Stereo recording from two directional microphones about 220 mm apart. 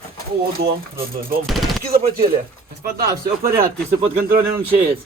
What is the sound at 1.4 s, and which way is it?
Machine gun, centre (ahead or behind).